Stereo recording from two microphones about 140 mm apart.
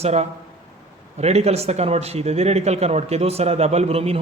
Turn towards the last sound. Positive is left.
turn(degrees=-45)  # may be behind; listen again after turning